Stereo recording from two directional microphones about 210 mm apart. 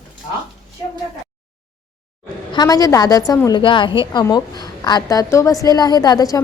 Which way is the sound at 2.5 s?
20° left (ahead or behind).